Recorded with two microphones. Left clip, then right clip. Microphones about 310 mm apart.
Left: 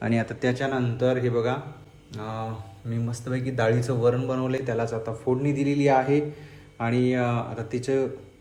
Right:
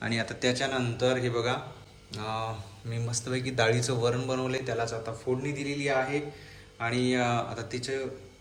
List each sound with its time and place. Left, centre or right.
0.0 s a man's voice: centre